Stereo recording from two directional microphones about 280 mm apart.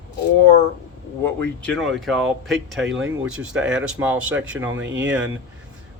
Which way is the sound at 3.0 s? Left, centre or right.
Right.